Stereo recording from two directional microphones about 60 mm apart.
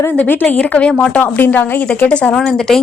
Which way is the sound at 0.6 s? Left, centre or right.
Centre.